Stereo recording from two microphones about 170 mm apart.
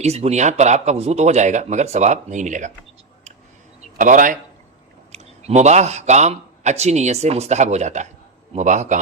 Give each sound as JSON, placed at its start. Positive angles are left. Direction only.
{"t": 0.0, "sound": "a man's voice", "side_deg": -40}
{"t": 3.9, "sound": "a man's voice", "side_deg": -50}